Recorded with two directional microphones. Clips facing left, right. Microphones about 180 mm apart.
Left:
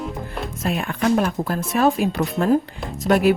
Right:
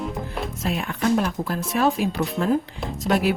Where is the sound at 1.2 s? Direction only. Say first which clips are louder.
Left 3 dB; 50° left (ahead or behind).